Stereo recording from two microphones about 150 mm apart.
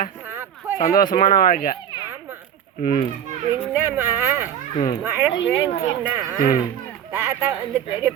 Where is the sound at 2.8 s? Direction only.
65° left (ahead or behind).